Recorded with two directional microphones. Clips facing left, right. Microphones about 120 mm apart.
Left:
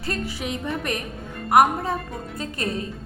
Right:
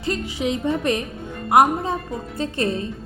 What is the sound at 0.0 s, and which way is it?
A woman's voice, 20° right (ahead or behind).